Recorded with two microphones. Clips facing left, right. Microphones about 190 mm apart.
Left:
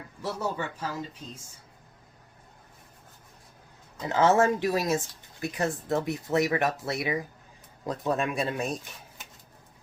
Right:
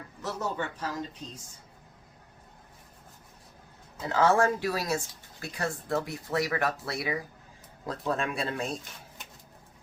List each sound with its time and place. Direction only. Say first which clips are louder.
0.2 s speech: left 1 dB; 10° left (ahead or behind)
4.1 s speech: left 2 dB; 20° left (ahead or behind)